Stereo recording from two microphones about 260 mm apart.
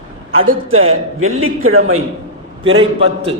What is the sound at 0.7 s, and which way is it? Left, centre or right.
A man's voice, right.